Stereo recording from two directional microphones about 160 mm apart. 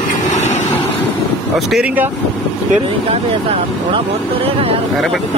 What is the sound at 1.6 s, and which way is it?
Speech, centre (ahead or behind).